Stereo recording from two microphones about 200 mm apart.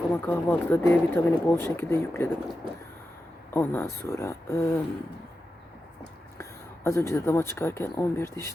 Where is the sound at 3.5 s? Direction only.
10° left (ahead or behind).